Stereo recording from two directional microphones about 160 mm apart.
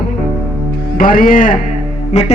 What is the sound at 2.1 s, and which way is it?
Music, 45° left (ahead or behind).